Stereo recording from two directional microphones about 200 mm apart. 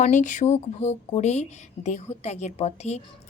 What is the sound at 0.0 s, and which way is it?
Speech, 40° left (ahead or behind).